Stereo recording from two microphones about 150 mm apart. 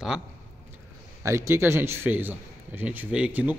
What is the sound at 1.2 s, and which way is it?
A man's voice, 20° right (ahead or behind).